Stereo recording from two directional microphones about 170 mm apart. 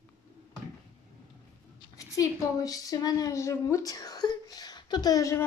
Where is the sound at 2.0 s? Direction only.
20° left (ahead or behind).